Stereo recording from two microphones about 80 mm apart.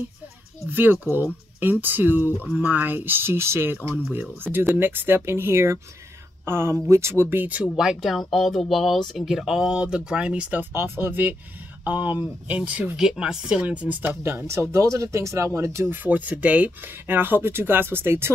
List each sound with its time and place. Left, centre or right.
0.7 s speech: right
7.7 s speech: centre
10.7 s speech: right
12.9 s speech: centre
14.0 s speech: right
15.9 s speech: right